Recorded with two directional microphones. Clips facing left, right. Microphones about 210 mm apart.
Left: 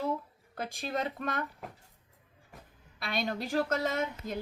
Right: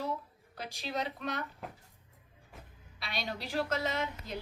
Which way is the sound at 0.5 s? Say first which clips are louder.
Left 3 dB; 50° left (ahead or behind).